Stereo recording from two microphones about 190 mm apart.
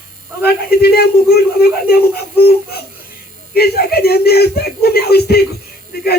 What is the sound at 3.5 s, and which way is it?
Speech, 55° left (ahead or behind).